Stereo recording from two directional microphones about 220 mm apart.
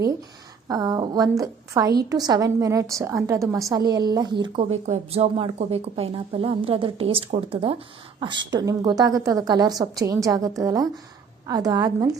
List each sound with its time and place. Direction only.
0.7 s a woman's voice: 15° right (ahead or behind)